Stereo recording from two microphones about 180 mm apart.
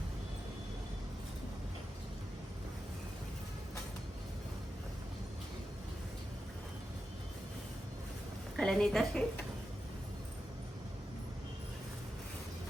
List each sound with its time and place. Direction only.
8.5 s a woman's voice: 5° left (ahead or behind)